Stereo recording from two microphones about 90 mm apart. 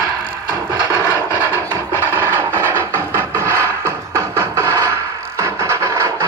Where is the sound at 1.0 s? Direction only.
25° left (ahead or behind).